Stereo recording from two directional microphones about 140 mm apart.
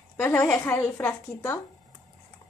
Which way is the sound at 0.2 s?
15° left (ahead or behind).